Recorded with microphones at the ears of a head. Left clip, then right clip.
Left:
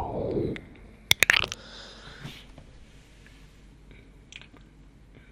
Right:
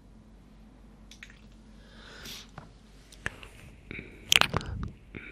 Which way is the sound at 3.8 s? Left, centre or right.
Right.